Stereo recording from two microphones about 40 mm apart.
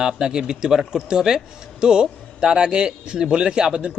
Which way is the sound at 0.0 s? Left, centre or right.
Centre.